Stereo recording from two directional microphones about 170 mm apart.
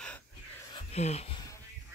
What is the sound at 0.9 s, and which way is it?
Speech, 40° left (ahead or behind).